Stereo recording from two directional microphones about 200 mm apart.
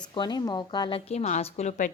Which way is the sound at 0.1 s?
20° left (ahead or behind).